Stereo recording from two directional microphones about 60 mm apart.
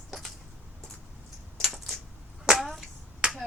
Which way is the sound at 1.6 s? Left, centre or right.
Centre.